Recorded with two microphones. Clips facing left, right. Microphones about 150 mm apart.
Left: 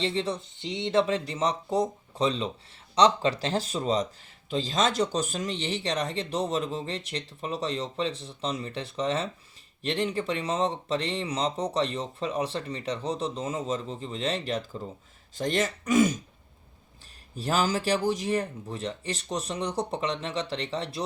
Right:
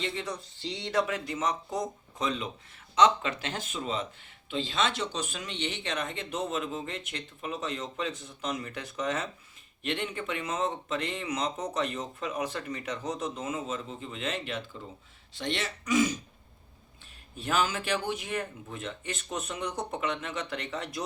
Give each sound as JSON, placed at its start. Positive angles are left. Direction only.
{"t": 0.0, "sound": "speech", "side_deg": 30}
{"t": 17.3, "sound": "speech", "side_deg": 35}